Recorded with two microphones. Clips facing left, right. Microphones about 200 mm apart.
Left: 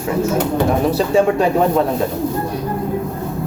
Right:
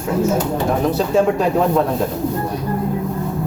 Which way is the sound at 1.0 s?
Centre (ahead or behind).